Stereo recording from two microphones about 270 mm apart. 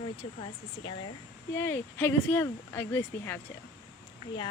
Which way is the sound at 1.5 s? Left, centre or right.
Centre.